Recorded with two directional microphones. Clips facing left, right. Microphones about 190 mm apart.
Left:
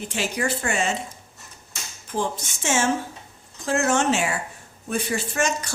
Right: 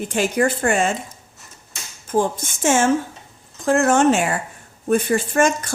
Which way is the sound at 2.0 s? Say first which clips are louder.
Right 7 dB; 50° right (ahead or behind).